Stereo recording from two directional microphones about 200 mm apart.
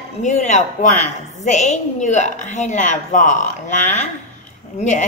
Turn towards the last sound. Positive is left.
turn(degrees=35)  # may be behind; listen again after turning